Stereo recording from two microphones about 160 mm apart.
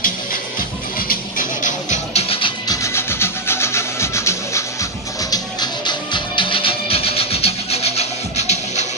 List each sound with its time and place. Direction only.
0.0 s music: 60° left (ahead or behind); by 2.5 s 35° left (ahead or behind)
2.7 s music: 15° left (ahead or behind); by 8.8 s 45° left (ahead or behind)